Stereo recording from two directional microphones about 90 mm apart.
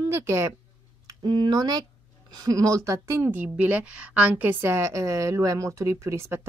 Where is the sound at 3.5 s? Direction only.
15° right (ahead or behind).